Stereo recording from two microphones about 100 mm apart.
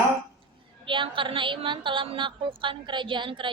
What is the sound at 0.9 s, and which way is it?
Speech, 55° right (ahead or behind).